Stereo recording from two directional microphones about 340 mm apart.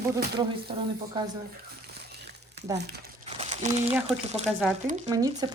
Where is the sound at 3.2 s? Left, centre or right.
Centre.